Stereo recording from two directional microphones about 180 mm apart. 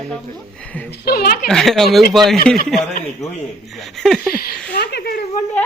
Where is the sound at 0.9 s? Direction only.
60° left (ahead or behind).